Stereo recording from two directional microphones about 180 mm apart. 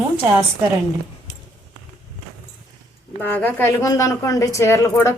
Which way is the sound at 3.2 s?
10° left (ahead or behind).